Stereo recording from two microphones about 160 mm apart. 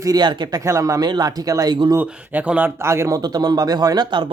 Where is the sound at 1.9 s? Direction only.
10° right (ahead or behind); by 4.3 s 30° right (ahead or behind).